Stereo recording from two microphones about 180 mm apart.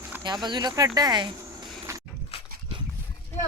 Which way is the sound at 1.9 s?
15° right (ahead or behind).